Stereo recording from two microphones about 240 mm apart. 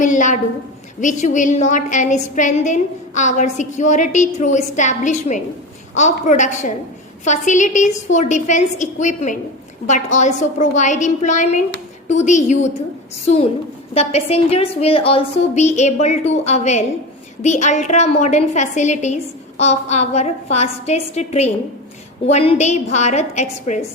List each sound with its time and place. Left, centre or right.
0.0 s a woman's voice: left